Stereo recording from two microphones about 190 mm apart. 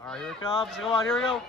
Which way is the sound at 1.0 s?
Centre (ahead or behind).